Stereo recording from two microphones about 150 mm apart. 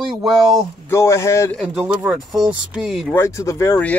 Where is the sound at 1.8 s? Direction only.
10° right (ahead or behind).